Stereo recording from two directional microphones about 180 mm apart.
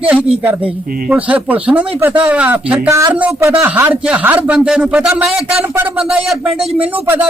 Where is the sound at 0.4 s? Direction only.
5° right (ahead or behind).